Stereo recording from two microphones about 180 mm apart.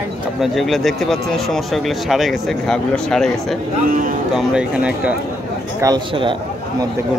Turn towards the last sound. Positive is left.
turn(degrees=-25)  # may be behind; listen again after turning